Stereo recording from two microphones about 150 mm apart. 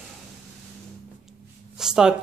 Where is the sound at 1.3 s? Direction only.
5° right (ahead or behind).